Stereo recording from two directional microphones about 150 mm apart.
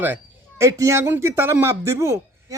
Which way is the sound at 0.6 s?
20° right (ahead or behind).